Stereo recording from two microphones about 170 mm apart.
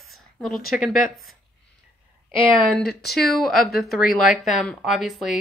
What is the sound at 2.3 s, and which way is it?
Speech, 30° left (ahead or behind).